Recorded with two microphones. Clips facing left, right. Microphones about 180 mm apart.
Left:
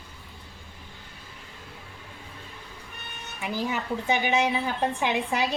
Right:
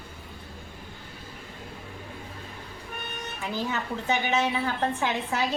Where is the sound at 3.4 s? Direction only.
15° left (ahead or behind).